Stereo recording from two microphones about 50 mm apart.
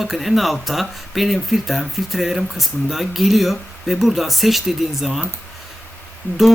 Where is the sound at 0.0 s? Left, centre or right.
Centre.